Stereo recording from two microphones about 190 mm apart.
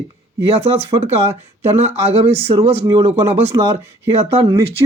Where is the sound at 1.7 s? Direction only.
35° right (ahead or behind).